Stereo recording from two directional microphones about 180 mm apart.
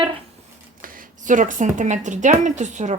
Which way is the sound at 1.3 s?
45° right (ahead or behind).